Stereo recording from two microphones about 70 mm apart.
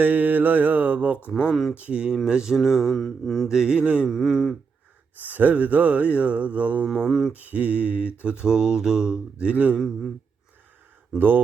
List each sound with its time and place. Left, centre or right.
0.0 s mantra: right
1.5 s mantra: centre
1.7 s mantra: centre
3.5 s mantra: centre
4.1 s mantra: centre
5.2 s a sound: right
6.9 s mantra: centre
7.3 s a sound: right
8.4 s mantra: centre
11.2 s a sound: right